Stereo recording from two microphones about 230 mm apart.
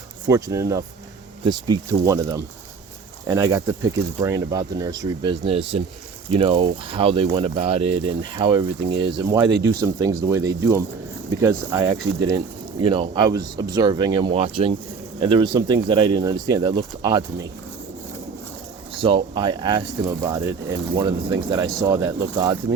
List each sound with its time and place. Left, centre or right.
0.3 s speech: centre
18.9 s speech: right